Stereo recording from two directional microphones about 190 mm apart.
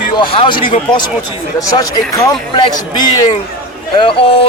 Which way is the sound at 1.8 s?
20° left (ahead or behind).